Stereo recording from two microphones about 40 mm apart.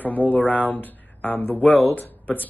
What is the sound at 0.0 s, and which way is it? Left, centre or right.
Speech, left.